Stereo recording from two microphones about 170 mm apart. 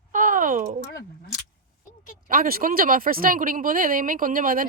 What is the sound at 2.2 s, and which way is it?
Speech, 55° right (ahead or behind).